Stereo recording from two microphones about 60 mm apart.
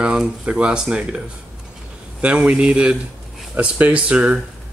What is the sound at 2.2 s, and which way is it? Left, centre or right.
Speech, right.